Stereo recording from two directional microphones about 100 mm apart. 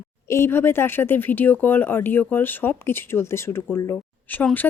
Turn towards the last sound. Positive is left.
turn(degrees=20)  # may be behind; listen again after turning